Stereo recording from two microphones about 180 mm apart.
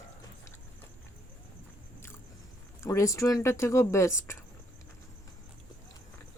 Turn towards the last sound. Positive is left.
turn(degrees=15)  # may be behind; listen again after turning